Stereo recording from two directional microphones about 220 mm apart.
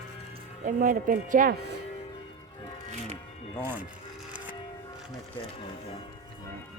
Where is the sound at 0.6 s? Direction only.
40° right (ahead or behind).